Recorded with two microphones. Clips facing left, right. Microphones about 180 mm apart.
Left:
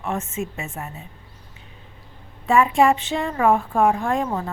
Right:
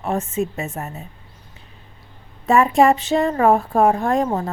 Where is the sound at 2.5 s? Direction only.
40° right (ahead or behind).